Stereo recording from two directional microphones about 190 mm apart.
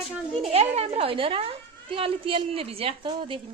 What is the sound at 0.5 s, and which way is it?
A woman's voice, 30° right (ahead or behind).